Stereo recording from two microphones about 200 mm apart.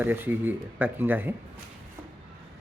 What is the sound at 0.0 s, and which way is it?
Speech, 10° right (ahead or behind).